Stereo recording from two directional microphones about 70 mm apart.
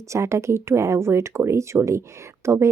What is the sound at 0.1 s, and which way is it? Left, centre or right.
A woman's voice, right.